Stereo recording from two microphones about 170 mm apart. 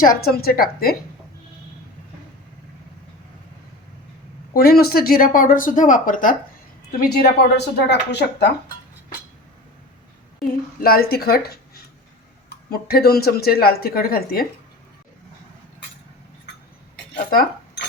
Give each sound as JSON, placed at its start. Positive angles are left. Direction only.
{"t": 0.2, "sound": "speech", "side_deg": 65}
{"t": 4.5, "sound": "speech", "side_deg": 65}
{"t": 7.0, "sound": "a woman's voice", "side_deg": 65}
{"t": 10.4, "sound": "speech", "side_deg": 60}